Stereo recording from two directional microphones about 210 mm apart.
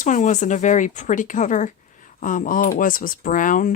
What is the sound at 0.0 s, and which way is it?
Speech, 35° left (ahead or behind).